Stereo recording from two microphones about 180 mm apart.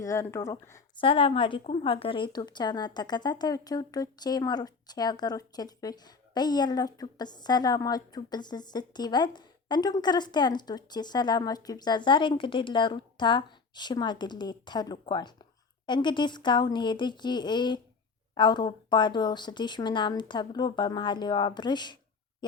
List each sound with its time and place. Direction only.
0.0 s speech: 15° left (ahead or behind)
0.9 s a woman's voice: 30° left (ahead or behind)